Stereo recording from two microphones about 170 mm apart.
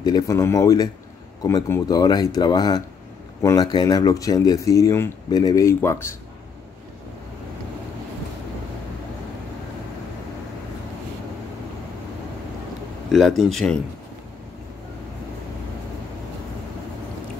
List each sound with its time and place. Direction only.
0.0 s speech: 20° left (ahead or behind)
13.1 s speech: centre (ahead or behind)